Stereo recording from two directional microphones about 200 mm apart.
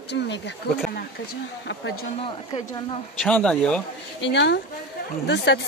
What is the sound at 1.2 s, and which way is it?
Speech, 75° left (ahead or behind).